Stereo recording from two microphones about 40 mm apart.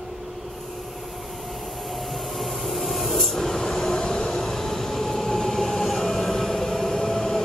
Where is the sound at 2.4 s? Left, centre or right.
Centre.